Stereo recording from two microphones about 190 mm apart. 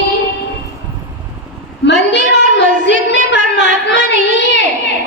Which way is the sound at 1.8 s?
65° left (ahead or behind).